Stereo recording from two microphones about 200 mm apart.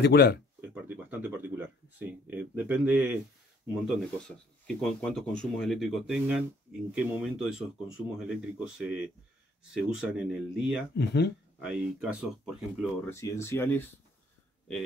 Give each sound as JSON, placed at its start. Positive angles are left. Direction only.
{"t": 0.0, "sound": "speech", "side_deg": 55}
{"t": 0.6, "sound": "a sound", "side_deg": -10}
{"t": 3.6, "sound": "speech", "side_deg": 0}
{"t": 11.0, "sound": "speech", "side_deg": 55}
{"t": 11.6, "sound": "speech", "side_deg": 0}
{"t": 13.0, "sound": "speech", "side_deg": 15}